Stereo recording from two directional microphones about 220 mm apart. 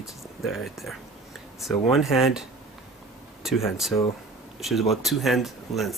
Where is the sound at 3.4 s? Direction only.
Centre (ahead or behind).